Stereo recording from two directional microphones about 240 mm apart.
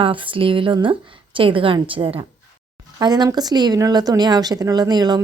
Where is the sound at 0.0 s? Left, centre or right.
Right.